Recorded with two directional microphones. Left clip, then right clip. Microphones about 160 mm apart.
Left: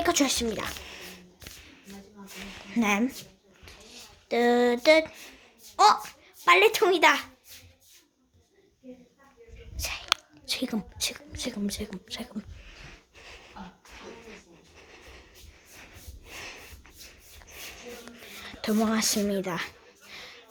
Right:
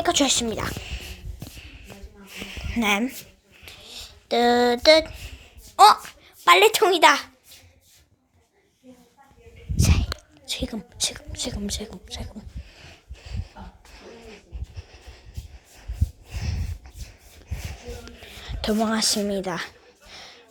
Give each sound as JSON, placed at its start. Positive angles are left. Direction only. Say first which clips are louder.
{"t": 0.0, "sound": "speech", "louder": "right 4 dB", "side_deg": 0}
{"t": 0.8, "sound": "a sound", "louder": "right 4 dB", "side_deg": 15}
{"t": 2.3, "sound": "a sound", "louder": "right 3 dB", "side_deg": 0}
{"t": 5.7, "sound": "a child's voice", "louder": "right 6 dB", "side_deg": -10}
{"t": 9.7, "sound": "biting", "louder": "even", "side_deg": 0}
{"t": 10.4, "sound": "speech", "louder": "right 1 dB", "side_deg": 20}
{"t": 10.9, "sound": "speech", "louder": "right 4 dB", "side_deg": 5}
{"t": 12.0, "sound": "speech", "louder": "even", "side_deg": 25}
{"t": 12.7, "sound": "a sound", "louder": "right 1 dB", "side_deg": 10}
{"t": 14.2, "sound": "music", "louder": "right 3 dB", "side_deg": 5}
{"t": 16.3, "sound": "snort", "louder": "even", "side_deg": 15}
{"t": 17.5, "sound": "a sound", "louder": "right 2 dB", "side_deg": 0}